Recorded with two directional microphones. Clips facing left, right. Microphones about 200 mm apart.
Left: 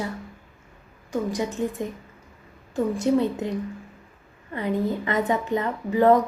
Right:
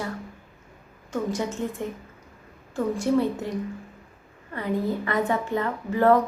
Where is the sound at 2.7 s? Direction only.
20° left (ahead or behind).